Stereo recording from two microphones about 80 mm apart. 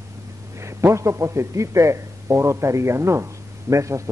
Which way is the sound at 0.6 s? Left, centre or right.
Right.